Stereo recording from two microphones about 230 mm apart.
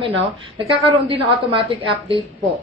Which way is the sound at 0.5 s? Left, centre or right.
Right.